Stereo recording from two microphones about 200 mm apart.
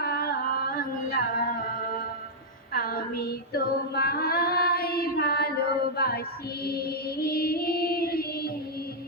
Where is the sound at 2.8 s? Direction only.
50° left (ahead or behind).